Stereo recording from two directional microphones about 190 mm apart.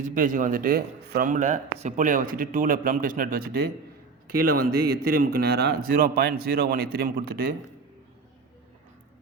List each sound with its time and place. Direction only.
0.0 s speech: 45° right (ahead or behind)